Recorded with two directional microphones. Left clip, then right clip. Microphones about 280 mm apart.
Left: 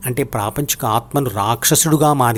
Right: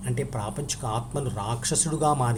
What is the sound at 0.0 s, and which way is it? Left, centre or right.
A man's voice, left.